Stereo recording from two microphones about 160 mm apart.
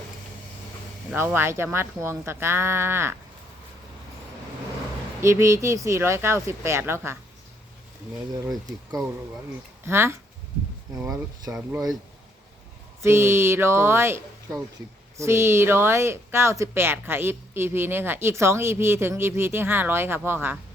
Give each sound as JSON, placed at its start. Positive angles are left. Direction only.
{"t": 1.1, "sound": "speech", "side_deg": -15}
{"t": 5.2, "sound": "speech", "side_deg": -15}
{"t": 9.8, "sound": "speech", "side_deg": -15}
{"t": 11.5, "sound": "speech", "side_deg": -5}
{"t": 13.0, "sound": "speech", "side_deg": -15}